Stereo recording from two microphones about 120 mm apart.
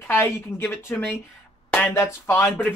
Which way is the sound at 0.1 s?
20° left (ahead or behind).